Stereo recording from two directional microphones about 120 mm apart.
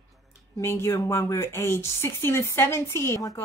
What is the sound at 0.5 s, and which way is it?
A woman's voice, 20° left (ahead or behind).